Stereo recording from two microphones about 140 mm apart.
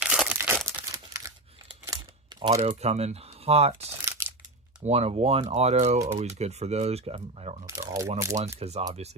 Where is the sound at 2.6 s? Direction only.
50° right (ahead or behind).